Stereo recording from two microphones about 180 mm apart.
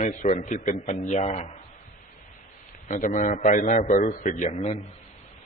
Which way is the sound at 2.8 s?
45° left (ahead or behind).